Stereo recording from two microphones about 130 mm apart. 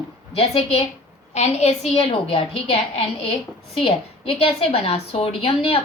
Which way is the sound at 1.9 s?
45° left (ahead or behind).